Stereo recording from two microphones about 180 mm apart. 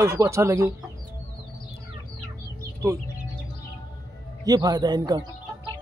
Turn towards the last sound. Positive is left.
turn(degrees=-25)  # may be behind; listen again after turning